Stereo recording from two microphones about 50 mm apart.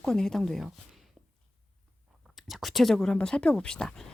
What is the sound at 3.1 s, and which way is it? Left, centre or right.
Speech, centre.